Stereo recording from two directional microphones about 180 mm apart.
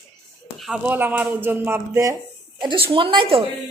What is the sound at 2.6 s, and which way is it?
Speech, 30° right (ahead or behind).